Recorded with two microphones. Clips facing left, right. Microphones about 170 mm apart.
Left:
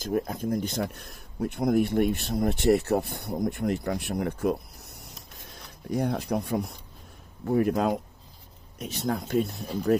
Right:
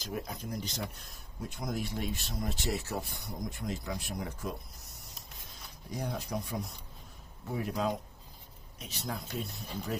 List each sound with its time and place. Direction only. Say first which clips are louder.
0.0 s speech: left 11 dB; 50° left (ahead or behind)
5.9 s speech: left 10 dB; 60° left (ahead or behind)